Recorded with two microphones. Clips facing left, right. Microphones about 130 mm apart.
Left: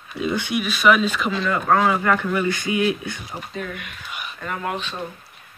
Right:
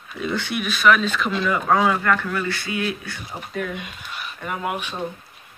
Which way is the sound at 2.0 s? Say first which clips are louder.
Left 2 dB; 10° left (ahead or behind).